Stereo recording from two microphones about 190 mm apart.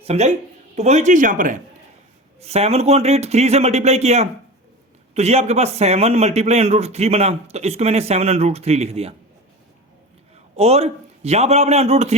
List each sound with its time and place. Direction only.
0.0 s a man's voice: 35° right (ahead or behind)
2.4 s a man's voice: 35° right (ahead or behind)
10.6 s a man's voice: 35° right (ahead or behind)